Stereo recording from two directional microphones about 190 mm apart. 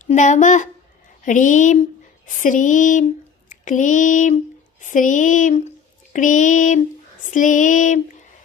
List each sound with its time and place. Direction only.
0.0 s speech: 40° left (ahead or behind)
2.2 s a sound: 45° left (ahead or behind)
4.8 s speech: 40° left (ahead or behind)